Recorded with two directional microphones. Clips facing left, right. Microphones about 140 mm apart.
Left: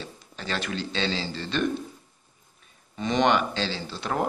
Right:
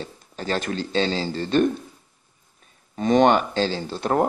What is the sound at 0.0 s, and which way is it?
Speech, 40° right (ahead or behind).